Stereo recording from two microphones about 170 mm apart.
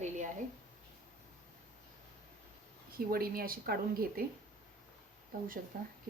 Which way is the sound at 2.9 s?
60° right (ahead or behind).